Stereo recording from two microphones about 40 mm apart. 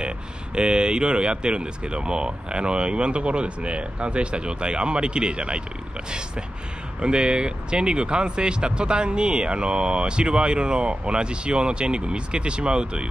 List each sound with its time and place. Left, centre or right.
0.6 s speech: right
7.0 s speech: right